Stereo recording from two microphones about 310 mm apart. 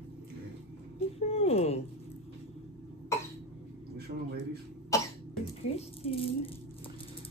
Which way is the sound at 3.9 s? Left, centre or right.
Right.